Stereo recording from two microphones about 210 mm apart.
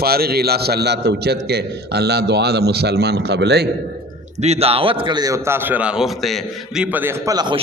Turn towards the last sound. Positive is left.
turn(degrees=-20)  # may be behind; listen again after turning